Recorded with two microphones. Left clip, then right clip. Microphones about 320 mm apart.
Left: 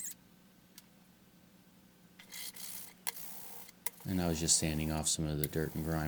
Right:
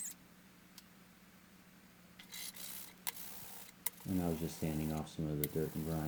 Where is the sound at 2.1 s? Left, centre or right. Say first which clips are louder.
Left 2 dB; centre.